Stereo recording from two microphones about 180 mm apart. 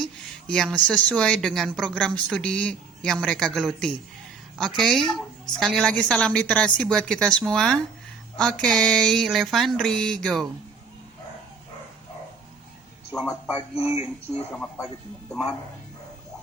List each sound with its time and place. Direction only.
0.0 s a woman's voice: 5° left (ahead or behind)
13.7 s speech: 35° left (ahead or behind)
14.5 s speech: 10° left (ahead or behind)